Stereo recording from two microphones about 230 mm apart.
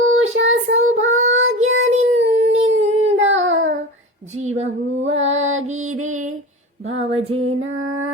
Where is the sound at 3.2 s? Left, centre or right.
Right.